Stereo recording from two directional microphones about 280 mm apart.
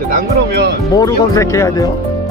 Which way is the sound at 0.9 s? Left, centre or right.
Centre.